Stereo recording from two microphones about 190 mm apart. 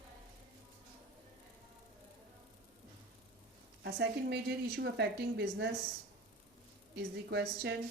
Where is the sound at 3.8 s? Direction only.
65° right (ahead or behind).